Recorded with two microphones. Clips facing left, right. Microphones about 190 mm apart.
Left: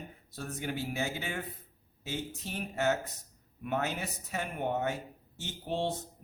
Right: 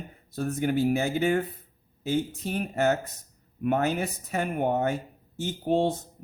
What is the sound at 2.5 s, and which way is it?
Speech, 55° right (ahead or behind).